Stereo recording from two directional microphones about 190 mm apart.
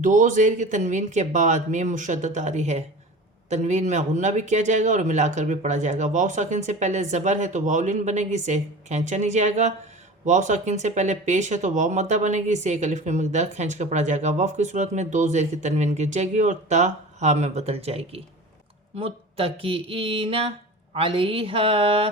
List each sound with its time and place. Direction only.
0.0 s speech: 40° right (ahead or behind)